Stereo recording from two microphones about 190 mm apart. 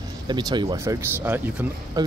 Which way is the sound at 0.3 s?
20° right (ahead or behind).